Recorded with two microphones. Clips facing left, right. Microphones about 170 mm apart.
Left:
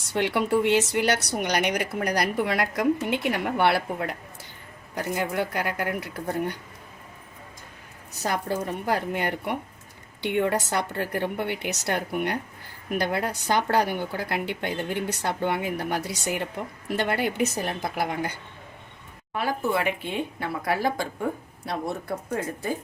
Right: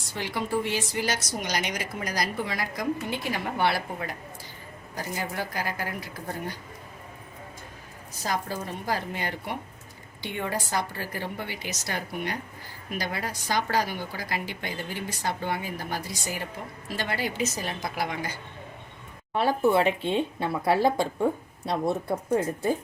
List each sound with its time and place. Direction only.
0.1 s a woman's voice: 70° left (ahead or behind)
8.2 s a woman's voice: 65° left (ahead or behind)
19.3 s speech: 30° right (ahead or behind)